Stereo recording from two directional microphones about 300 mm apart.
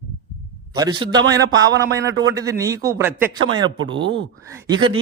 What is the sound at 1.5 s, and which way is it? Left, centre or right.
Speech, right.